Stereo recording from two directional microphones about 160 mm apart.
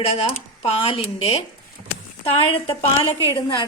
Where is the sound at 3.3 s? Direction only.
20° left (ahead or behind).